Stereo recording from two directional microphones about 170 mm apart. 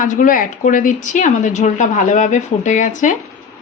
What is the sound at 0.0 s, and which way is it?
A woman's voice, 50° left (ahead or behind).